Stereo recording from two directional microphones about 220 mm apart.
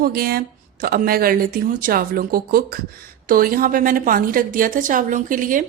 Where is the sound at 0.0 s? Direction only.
40° right (ahead or behind).